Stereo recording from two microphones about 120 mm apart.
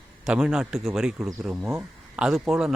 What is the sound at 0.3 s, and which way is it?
Speech, 5° right (ahead or behind).